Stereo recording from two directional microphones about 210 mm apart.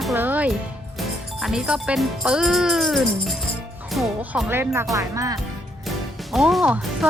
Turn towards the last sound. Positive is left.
turn(degrees=0)  # may be behind; listen again after turning